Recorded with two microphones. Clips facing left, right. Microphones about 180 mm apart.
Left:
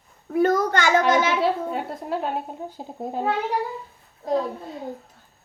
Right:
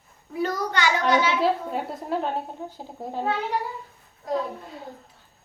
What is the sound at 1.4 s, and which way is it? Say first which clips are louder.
Speech: left 1 dB; centre (ahead or behind).